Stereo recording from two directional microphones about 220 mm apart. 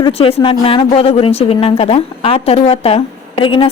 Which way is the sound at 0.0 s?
25° left (ahead or behind).